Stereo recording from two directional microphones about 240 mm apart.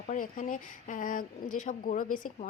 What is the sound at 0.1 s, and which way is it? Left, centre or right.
Speech, left.